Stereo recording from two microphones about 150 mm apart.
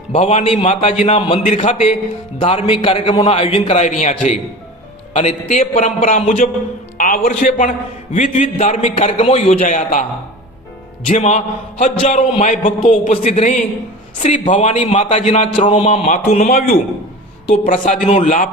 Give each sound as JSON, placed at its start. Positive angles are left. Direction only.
{"t": 0.1, "sound": "a man's voice", "side_deg": 45}
{"t": 5.1, "sound": "a man's voice", "side_deg": 45}
{"t": 6.9, "sound": "music", "side_deg": 70}
{"t": 7.2, "sound": "a man's voice", "side_deg": 55}
{"t": 9.6, "sound": "a man's voice", "side_deg": 60}
{"t": 11.1, "sound": "a man's voice", "side_deg": 50}
{"t": 15.5, "sound": "a man's voice", "side_deg": 35}
{"t": 16.0, "sound": "a man's voice", "side_deg": 55}